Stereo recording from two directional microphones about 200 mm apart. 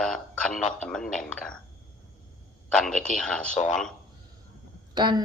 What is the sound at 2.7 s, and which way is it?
Speech, 5° left (ahead or behind).